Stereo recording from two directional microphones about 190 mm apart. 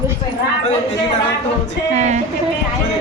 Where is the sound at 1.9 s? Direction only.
35° right (ahead or behind).